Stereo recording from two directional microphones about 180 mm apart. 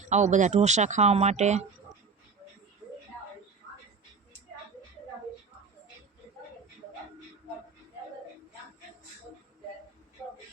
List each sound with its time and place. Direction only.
0.0 s speech: 40° right (ahead or behind)